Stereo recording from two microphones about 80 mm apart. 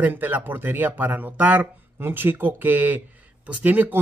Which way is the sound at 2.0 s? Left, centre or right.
Right.